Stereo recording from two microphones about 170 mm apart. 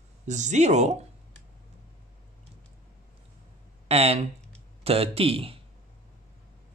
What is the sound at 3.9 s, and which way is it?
Speech, 35° right (ahead or behind).